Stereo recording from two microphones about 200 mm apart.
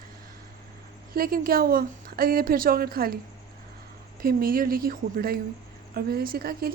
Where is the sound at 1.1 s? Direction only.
45° right (ahead or behind).